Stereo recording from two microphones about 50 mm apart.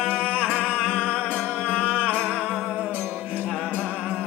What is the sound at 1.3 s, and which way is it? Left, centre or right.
Music, left.